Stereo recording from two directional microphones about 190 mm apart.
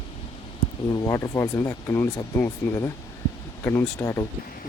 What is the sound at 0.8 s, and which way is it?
Speech, 20° left (ahead or behind).